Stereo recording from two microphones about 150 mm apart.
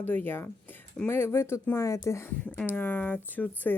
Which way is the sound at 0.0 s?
15° left (ahead or behind).